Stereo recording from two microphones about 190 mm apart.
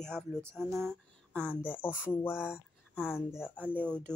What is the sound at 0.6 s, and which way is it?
Speech, 15° right (ahead or behind).